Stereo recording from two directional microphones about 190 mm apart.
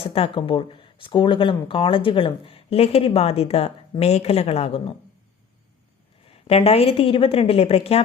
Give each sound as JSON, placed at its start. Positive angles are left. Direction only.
{"t": 0.0, "sound": "speech", "side_deg": 30}
{"t": 6.2, "sound": "a woman's voice", "side_deg": 30}